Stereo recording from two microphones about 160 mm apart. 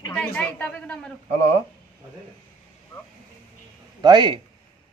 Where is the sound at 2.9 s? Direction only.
15° left (ahead or behind).